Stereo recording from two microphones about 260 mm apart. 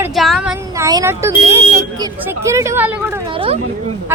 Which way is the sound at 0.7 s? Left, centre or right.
Centre.